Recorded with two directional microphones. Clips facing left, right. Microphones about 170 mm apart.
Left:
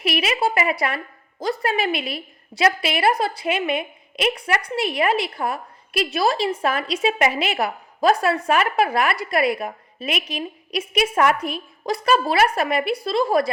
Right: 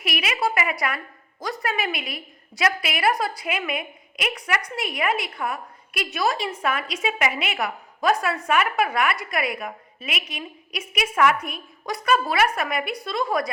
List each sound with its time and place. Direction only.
0.0 s a woman's voice: 30° left (ahead or behind)